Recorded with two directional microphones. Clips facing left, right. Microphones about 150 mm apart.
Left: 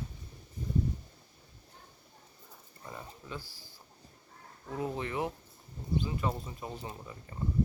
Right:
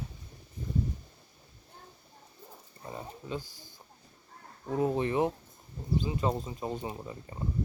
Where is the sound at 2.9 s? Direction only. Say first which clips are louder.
Right 5 dB; 25° right (ahead or behind).